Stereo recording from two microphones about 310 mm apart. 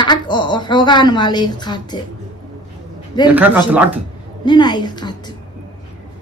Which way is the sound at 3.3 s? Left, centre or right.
Centre.